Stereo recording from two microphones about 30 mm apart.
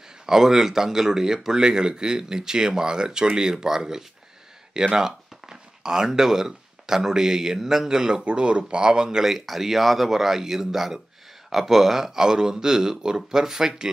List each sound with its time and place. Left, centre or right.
0.3 s speech: centre
9.2 s speech: centre